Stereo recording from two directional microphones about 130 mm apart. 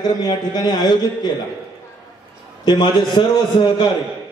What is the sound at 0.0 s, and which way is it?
Mantra, 30° left (ahead or behind).